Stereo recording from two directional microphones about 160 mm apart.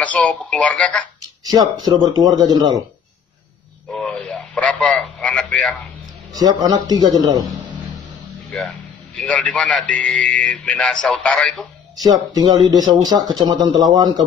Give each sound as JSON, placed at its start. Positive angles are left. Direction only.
{"t": 0.0, "sound": "a man's voice", "side_deg": 10}
{"t": 1.4, "sound": "speech", "side_deg": -25}
{"t": 3.9, "sound": "radio", "side_deg": 5}
{"t": 6.3, "sound": "speech", "side_deg": -25}
{"t": 8.5, "sound": "a man's voice", "side_deg": 5}
{"t": 12.0, "sound": "speech", "side_deg": -25}